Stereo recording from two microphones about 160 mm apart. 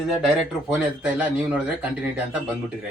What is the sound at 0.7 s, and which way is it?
A man's voice, 5° right (ahead or behind).